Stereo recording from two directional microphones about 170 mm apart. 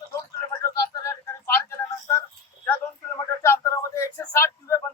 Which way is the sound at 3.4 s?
15° left (ahead or behind).